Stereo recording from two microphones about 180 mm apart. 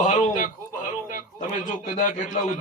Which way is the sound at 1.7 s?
45° left (ahead or behind).